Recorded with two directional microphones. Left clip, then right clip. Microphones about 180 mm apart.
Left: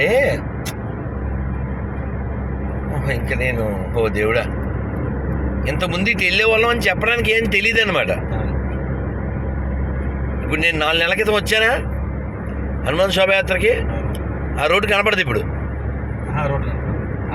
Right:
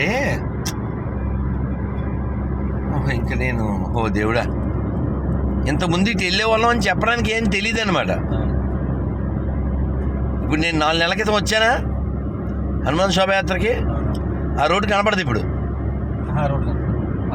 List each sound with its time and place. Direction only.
0.0 s vehicle: 5° right (ahead or behind)
3.1 s speech: 5° right (ahead or behind)
4.0 s speech: 20° right (ahead or behind)
5.6 s speech: 20° right (ahead or behind)
10.6 s speech: 15° right (ahead or behind)
12.8 s speech: 15° right (ahead or behind)